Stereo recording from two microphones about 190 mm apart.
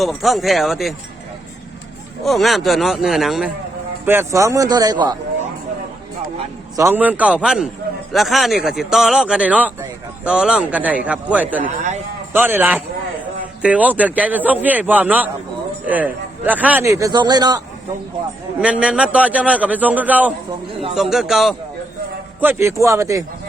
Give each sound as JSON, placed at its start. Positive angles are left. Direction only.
{"t": 0.0, "sound": "speech", "side_deg": 0}
{"t": 2.2, "sound": "speech", "side_deg": 0}
{"t": 4.0, "sound": "a man's voice", "side_deg": -10}
{"t": 6.7, "sound": "a man's voice", "side_deg": -10}
{"t": 11.6, "sound": "a man's voice", "side_deg": -40}
{"t": 12.3, "sound": "a man's voice", "side_deg": -10}
{"t": 18.6, "sound": "a man's voice", "side_deg": -5}
{"t": 22.4, "sound": "a man's voice", "side_deg": -10}